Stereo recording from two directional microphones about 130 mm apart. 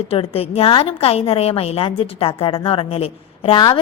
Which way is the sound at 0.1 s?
50° left (ahead or behind).